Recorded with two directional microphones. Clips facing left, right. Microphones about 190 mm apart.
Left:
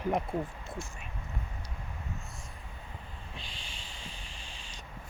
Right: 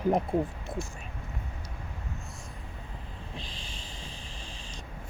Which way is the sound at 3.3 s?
40° right (ahead or behind).